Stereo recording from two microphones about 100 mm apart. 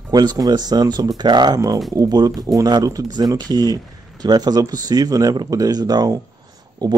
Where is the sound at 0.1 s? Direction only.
45° right (ahead or behind).